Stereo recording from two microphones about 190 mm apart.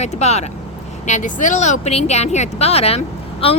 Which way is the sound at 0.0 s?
35° left (ahead or behind).